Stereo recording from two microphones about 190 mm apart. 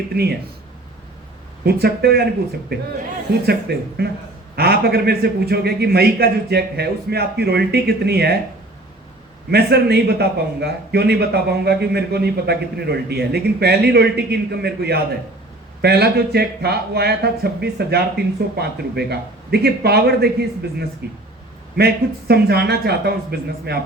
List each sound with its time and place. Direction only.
0.1 s a man's voice: 55° right (ahead or behind)
1.6 s a man's voice: 55° right (ahead or behind)
3.4 s a man's voice: 55° right (ahead or behind)
9.5 s a man's voice: 55° right (ahead or behind)